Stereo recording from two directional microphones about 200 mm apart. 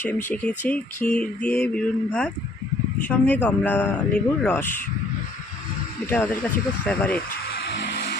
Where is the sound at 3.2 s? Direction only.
10° left (ahead or behind).